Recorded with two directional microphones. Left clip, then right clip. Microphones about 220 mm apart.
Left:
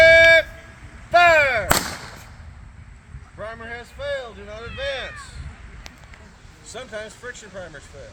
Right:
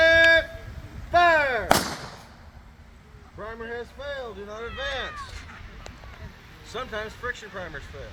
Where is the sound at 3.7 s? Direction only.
30° left (ahead or behind).